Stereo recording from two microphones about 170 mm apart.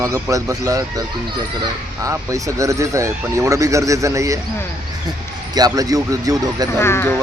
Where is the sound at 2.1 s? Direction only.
20° right (ahead or behind).